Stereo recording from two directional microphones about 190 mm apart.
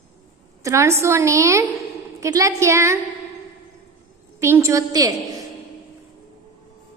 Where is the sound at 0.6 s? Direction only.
15° right (ahead or behind).